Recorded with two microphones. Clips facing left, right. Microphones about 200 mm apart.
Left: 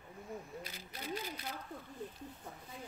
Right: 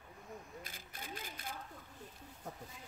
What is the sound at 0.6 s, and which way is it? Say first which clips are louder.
Speech: left 4 dB; 50° right (ahead or behind).